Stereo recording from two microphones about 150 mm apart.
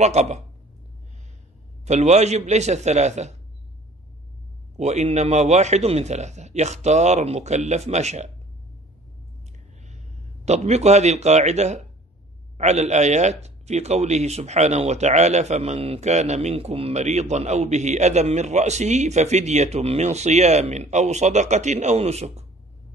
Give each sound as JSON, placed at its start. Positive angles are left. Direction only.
{"t": 0.0, "sound": "speech", "side_deg": -50}
{"t": 1.9, "sound": "speech", "side_deg": -50}
{"t": 4.7, "sound": "speech", "side_deg": -50}
{"t": 10.4, "sound": "speech", "side_deg": -45}